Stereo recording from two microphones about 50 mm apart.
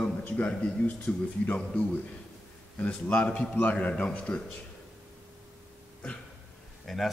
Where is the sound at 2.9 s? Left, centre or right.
Left.